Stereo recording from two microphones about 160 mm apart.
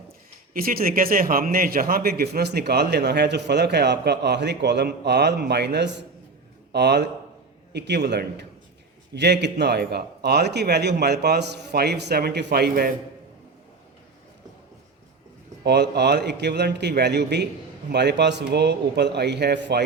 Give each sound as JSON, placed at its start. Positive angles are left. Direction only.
{"t": 0.5, "sound": "a man's voice", "side_deg": -65}
{"t": 15.6, "sound": "a man's voice", "side_deg": -90}